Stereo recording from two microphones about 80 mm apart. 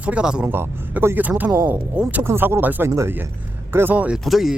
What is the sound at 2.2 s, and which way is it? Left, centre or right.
Speech, right.